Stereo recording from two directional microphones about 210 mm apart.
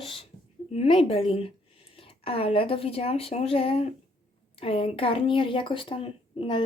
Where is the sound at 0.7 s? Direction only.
25° left (ahead or behind).